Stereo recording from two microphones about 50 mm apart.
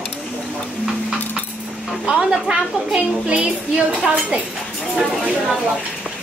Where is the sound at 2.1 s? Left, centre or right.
Centre.